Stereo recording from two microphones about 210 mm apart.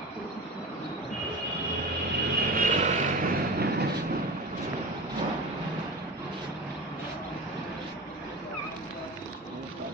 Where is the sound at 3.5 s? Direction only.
50° right (ahead or behind).